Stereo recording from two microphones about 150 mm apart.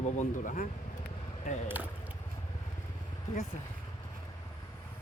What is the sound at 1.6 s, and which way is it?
Speech, 10° right (ahead or behind).